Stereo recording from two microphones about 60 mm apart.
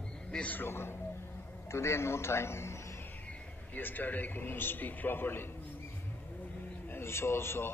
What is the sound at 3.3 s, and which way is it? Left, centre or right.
A man's voice, left.